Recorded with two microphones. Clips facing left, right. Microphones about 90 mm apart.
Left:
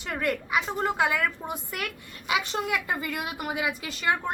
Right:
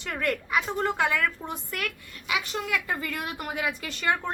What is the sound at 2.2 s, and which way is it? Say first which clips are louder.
A woman's voice: left 2 dB; 25° left (ahead or behind).